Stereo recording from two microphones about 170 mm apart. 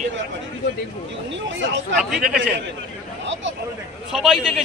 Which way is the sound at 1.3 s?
90° right.